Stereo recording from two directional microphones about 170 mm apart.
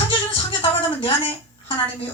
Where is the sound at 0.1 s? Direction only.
30° left (ahead or behind).